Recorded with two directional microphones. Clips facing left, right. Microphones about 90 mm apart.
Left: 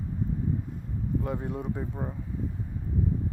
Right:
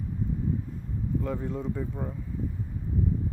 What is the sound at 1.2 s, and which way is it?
Speech, 15° left (ahead or behind).